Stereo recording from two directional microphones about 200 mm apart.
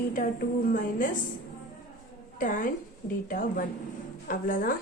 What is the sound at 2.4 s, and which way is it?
A woman's voice, 40° left (ahead or behind).